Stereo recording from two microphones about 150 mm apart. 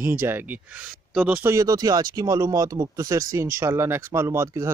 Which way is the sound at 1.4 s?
20° right (ahead or behind).